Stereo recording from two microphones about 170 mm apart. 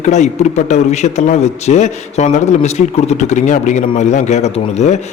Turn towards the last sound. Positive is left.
turn(degrees=45)  # may be behind; listen again after turning